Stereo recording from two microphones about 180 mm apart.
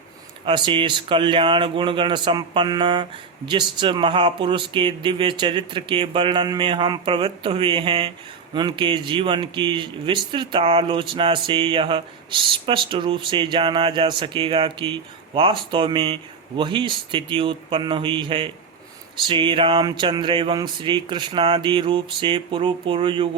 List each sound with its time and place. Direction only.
0.4 s speech: 25° right (ahead or behind)